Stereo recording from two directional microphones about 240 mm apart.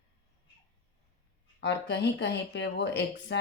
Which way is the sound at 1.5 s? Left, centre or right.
Left.